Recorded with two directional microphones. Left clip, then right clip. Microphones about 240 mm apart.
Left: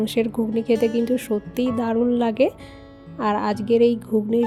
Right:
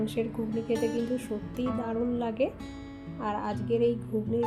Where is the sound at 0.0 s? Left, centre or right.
Left.